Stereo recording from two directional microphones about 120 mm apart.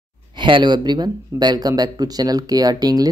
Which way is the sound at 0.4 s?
40° right (ahead or behind).